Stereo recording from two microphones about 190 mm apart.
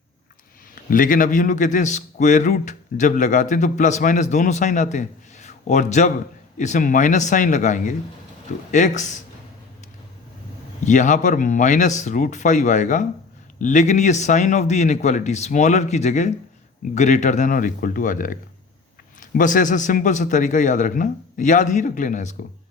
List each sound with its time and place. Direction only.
0.9 s speech: 45° left (ahead or behind)
10.8 s speech: 40° left (ahead or behind)